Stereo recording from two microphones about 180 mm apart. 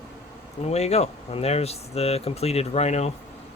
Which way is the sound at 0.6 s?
35° left (ahead or behind).